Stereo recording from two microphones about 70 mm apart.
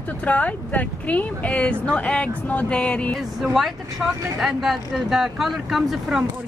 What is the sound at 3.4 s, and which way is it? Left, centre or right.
Speech, centre.